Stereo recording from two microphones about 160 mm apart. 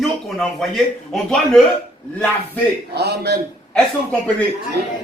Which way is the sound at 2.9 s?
90° right.